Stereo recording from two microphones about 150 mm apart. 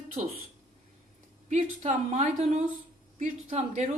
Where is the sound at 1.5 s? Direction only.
55° right (ahead or behind).